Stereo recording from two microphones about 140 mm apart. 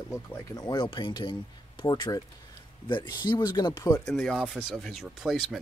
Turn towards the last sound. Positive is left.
turn(degrees=-5)  # may be behind; listen again after turning